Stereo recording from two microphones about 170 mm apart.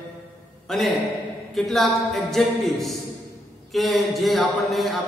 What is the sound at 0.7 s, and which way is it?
A man's voice, centre (ahead or behind).